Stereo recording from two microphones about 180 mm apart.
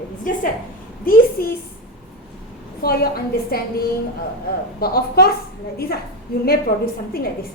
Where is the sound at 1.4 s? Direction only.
55° left (ahead or behind).